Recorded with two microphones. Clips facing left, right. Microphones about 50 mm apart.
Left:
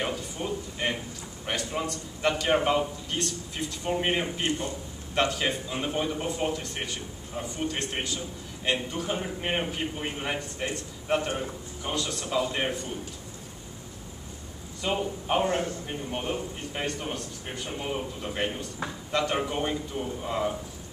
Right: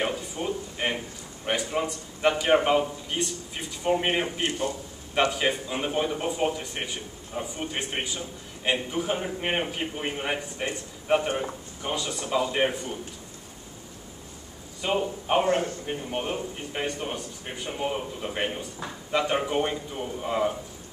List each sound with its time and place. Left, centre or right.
0.0 s a sound: centre
1.4 s speech: centre
4.4 s a man's voice: right
5.1 s speech: centre
14.8 s speech: centre
15.4 s a man's voice: right
15.9 s speech: centre